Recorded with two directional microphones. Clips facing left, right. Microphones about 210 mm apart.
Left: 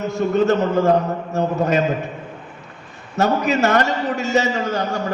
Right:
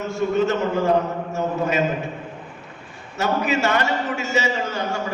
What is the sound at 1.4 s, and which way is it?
Speech, 40° left (ahead or behind).